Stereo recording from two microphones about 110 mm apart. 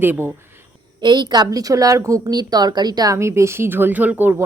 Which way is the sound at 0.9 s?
45° right (ahead or behind).